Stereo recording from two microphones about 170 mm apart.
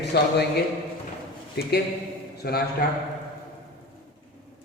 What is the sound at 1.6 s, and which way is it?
A man's voice, 70° left (ahead or behind).